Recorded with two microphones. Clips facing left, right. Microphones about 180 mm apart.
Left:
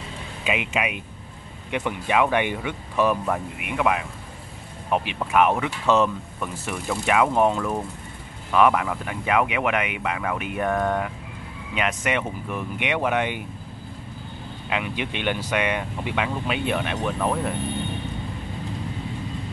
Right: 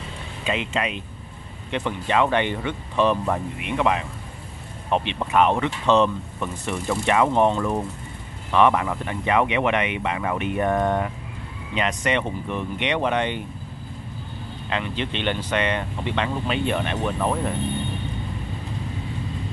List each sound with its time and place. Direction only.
0.4 s speech: 10° left (ahead or behind)
5.2 s speech: 5° left (ahead or behind)
10.7 s speech: 20° right (ahead or behind)
11.7 s speech: 5° left (ahead or behind)
14.7 s speech: 10° left (ahead or behind)